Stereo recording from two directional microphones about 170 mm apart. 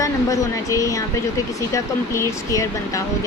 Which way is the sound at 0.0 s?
20° left (ahead or behind).